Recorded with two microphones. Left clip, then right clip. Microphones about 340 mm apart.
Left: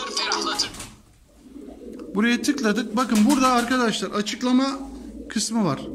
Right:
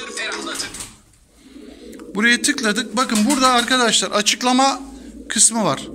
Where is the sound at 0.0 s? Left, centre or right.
Left.